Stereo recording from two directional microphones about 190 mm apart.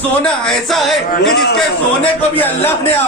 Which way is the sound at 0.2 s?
Centre (ahead or behind).